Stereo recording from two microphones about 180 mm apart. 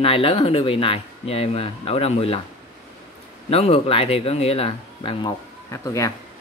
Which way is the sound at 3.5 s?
30° left (ahead or behind).